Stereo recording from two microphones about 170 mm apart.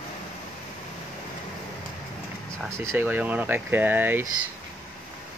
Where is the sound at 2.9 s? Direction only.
10° right (ahead or behind).